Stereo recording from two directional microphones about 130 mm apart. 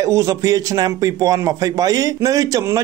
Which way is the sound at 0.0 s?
25° right (ahead or behind).